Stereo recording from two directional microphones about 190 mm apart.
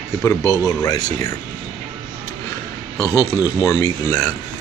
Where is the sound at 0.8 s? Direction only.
20° left (ahead or behind).